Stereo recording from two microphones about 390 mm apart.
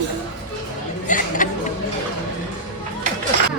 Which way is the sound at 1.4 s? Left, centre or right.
Centre.